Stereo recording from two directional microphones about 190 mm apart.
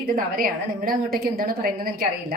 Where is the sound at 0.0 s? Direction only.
45° right (ahead or behind).